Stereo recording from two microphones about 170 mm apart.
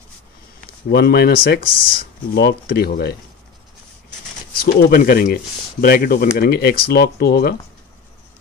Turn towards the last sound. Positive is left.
turn(degrees=70)  # may be behind; listen again after turning